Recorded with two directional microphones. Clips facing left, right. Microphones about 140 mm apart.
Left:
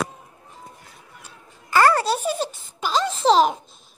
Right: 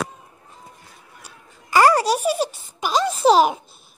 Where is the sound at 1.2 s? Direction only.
15° right (ahead or behind).